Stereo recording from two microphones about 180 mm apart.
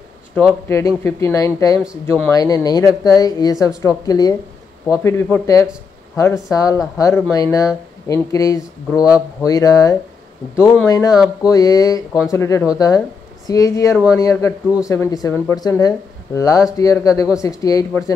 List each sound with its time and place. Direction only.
0.7 s speech: 15° left (ahead or behind)